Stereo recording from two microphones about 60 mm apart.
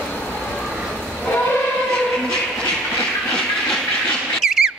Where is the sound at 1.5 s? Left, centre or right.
Centre.